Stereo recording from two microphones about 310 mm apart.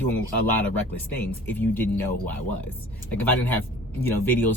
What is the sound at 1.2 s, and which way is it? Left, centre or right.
Speech, centre.